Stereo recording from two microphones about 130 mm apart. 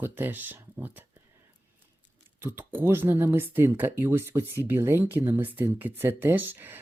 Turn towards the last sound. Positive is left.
turn(degrees=-15)  # may be behind; listen again after turning